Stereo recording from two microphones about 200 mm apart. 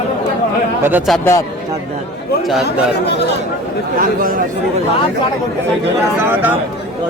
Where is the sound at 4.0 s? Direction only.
45° right (ahead or behind).